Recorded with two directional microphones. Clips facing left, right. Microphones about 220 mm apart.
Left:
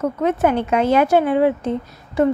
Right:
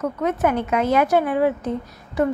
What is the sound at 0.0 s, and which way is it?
A woman's voice, 30° left (ahead or behind).